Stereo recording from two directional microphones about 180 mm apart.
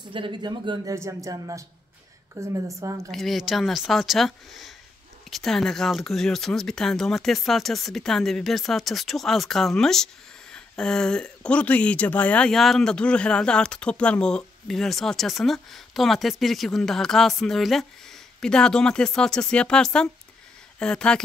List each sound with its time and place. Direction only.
0.0 s a woman's voice: 30° right (ahead or behind)
3.1 s speech: centre (ahead or behind)